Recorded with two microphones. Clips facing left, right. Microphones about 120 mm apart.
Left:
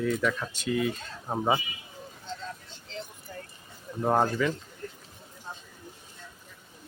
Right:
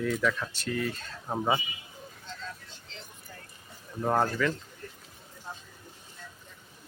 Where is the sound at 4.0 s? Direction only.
15° left (ahead or behind).